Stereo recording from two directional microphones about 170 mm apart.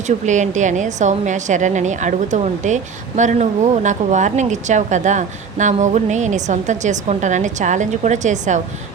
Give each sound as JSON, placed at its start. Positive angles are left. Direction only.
{"t": 0.3, "sound": "a woman's voice", "side_deg": -45}